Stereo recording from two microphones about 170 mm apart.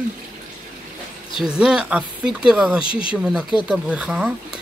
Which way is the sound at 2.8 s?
30° left (ahead or behind).